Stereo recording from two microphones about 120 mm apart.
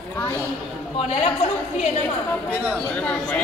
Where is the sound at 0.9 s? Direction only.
60° left (ahead or behind).